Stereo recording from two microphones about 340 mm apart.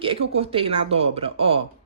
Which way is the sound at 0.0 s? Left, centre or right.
Centre.